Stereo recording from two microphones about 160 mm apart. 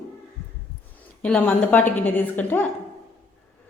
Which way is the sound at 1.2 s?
5° left (ahead or behind).